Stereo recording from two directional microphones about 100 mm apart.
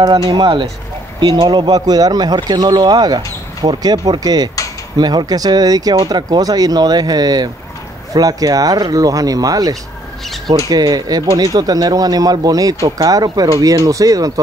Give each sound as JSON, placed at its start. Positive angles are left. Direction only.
{"t": 0.0, "sound": "speech", "side_deg": -40}